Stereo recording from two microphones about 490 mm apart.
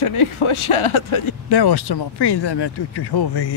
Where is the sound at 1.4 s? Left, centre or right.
Left.